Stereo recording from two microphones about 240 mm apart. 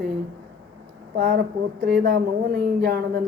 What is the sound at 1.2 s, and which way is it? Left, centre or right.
Speech, right.